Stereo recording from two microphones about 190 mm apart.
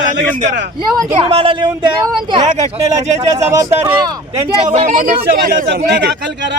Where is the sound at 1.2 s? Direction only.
30° right (ahead or behind).